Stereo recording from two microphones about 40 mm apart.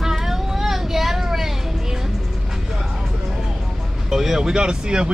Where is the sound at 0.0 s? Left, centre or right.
Centre.